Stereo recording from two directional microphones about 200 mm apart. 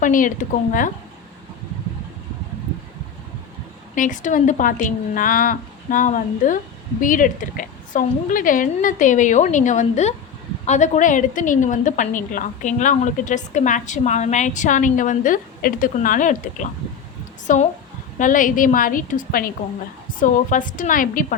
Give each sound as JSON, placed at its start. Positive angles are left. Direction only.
{"t": 0.0, "sound": "a woman's voice", "side_deg": 40}
{"t": 3.9, "sound": "a woman's voice", "side_deg": 40}